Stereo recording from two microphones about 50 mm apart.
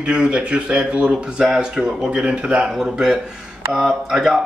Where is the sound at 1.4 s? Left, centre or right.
Centre.